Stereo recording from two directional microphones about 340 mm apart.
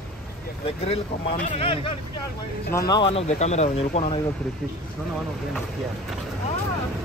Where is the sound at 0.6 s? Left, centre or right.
Centre.